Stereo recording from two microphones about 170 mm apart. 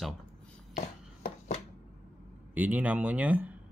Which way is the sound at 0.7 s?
50° left (ahead or behind).